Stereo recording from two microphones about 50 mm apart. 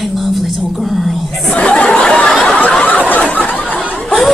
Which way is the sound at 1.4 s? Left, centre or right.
Left.